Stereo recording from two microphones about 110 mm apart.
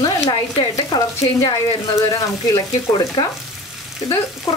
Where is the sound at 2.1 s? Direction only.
35° left (ahead or behind).